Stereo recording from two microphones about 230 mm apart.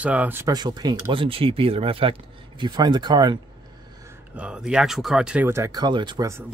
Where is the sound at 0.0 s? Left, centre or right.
Centre.